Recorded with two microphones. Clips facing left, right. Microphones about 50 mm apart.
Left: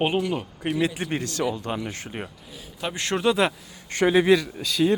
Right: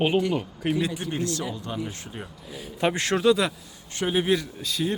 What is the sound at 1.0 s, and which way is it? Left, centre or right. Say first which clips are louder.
A man's voice: left 2 dB; left.